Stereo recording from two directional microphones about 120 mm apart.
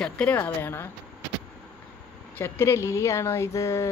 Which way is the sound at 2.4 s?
20° left (ahead or behind).